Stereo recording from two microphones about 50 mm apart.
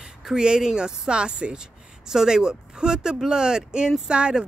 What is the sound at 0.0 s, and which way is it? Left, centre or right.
Speech, centre.